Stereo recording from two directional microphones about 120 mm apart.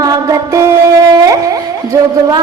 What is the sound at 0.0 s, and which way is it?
Music, 30° right (ahead or behind).